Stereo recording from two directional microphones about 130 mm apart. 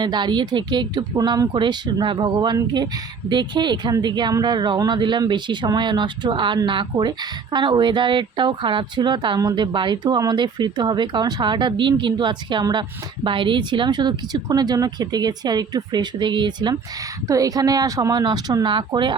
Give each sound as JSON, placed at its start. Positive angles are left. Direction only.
{"t": 0.0, "sound": "speech", "side_deg": -35}